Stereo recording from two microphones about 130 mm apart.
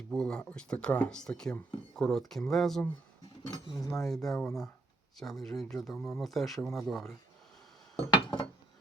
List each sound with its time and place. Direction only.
0.1 s speech: 5° left (ahead or behind)
3.5 s speech: 30° left (ahead or behind)
3.9 s speech: centre (ahead or behind)
7.9 s a sound: 45° left (ahead or behind)